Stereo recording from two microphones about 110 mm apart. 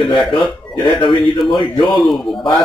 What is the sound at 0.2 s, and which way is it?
A man's voice, 45° left (ahead or behind).